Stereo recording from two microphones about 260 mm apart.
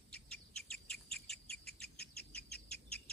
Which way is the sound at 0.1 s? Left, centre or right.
Centre.